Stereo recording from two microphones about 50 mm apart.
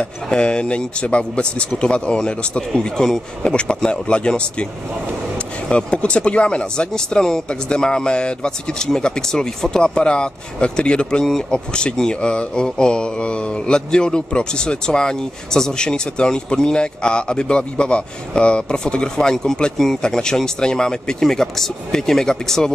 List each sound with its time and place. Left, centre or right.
0.0 s speech: centre
5.7 s speech: left